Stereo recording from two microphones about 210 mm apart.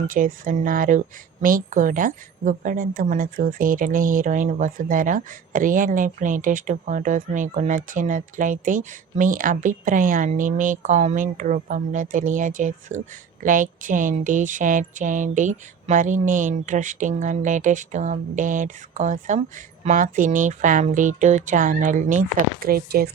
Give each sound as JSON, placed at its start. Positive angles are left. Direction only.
{"t": 0.1, "sound": "a woman's voice", "side_deg": -40}